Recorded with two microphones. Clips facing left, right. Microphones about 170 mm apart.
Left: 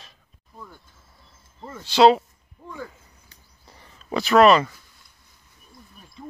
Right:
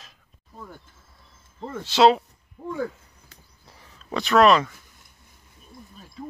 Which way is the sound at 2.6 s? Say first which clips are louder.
Right 9 dB; 80° right.